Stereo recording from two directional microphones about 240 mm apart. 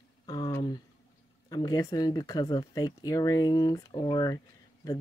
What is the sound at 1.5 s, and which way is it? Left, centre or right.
Speech, centre.